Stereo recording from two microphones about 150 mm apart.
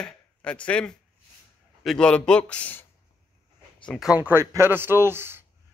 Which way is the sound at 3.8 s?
5° right (ahead or behind).